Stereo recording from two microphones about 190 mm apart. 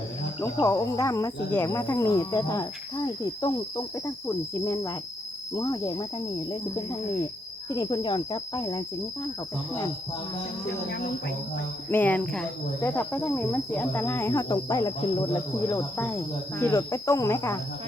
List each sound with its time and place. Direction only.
0.6 s speech: 15° left (ahead or behind)
5.5 s insect: 20° left (ahead or behind)
7.7 s insect: 20° left (ahead or behind)
11.9 s speech: 10° left (ahead or behind)